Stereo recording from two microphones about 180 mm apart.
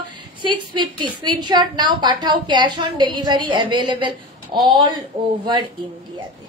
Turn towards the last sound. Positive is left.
turn(degrees=-25)  # may be behind; listen again after turning